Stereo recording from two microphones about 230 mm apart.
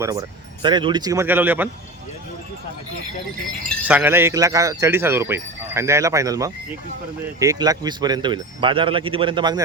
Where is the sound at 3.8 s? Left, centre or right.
Centre.